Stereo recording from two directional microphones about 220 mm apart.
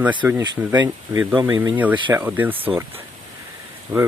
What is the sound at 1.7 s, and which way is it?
Speech, 5° right (ahead or behind).